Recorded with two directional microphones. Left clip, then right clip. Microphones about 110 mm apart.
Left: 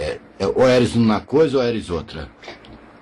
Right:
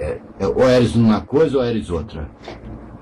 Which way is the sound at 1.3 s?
40° left (ahead or behind).